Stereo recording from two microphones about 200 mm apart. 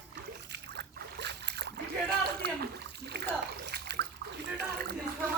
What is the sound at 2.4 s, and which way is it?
Splash, 55° right (ahead or behind).